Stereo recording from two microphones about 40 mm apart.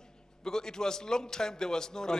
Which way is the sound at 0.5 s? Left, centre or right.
Centre.